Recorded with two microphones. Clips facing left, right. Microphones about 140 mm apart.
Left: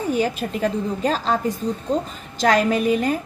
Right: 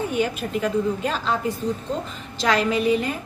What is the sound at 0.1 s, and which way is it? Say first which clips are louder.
A woman's voice: left 2 dB; 35° left (ahead or behind).